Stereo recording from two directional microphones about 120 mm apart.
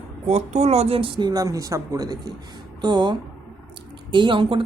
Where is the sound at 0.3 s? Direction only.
65° right (ahead or behind).